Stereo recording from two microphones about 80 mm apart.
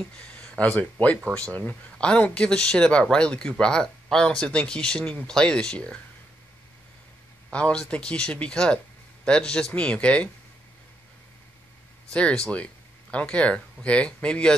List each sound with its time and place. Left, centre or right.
0.2 s speech: centre
7.5 s speech: centre
12.1 s speech: centre